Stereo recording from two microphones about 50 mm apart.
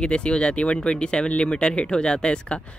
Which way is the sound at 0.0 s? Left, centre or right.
Left.